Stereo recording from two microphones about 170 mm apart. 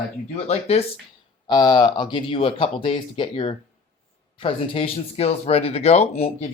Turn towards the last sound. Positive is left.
turn(degrees=35)  # may be behind; listen again after turning